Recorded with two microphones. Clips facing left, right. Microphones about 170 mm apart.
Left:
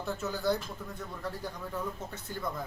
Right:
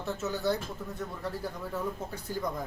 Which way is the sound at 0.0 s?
Centre (ahead or behind).